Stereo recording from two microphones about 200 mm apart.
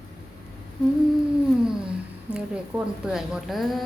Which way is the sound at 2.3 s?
5° right (ahead or behind).